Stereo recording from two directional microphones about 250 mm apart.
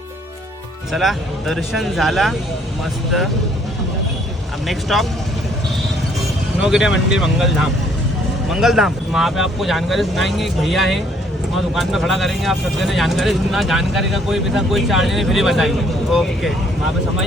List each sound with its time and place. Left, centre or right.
0.9 s speech: centre
4.6 s speech: centre
6.6 s speech: centre